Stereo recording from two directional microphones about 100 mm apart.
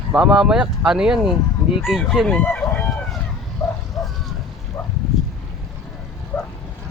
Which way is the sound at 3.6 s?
Centre (ahead or behind).